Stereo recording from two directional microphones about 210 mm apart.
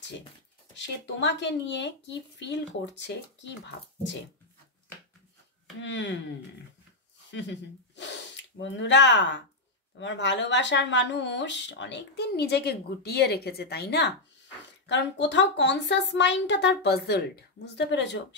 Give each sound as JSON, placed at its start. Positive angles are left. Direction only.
{"t": 0.7, "sound": "speech", "side_deg": 60}
{"t": 5.8, "sound": "speech", "side_deg": 60}
{"t": 7.2, "sound": "speech", "side_deg": 60}